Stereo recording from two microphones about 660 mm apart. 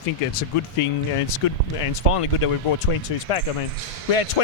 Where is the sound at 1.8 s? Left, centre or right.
Left.